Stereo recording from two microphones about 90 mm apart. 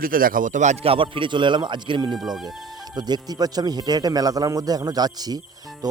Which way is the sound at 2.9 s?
50° right (ahead or behind).